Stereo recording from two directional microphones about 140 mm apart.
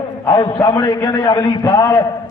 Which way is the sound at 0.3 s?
30° left (ahead or behind).